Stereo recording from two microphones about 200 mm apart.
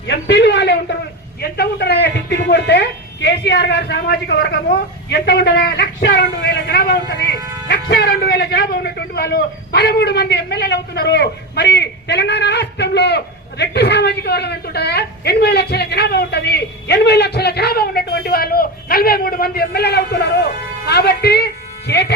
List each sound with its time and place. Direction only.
0.1 s a man's voice: 60° left (ahead or behind)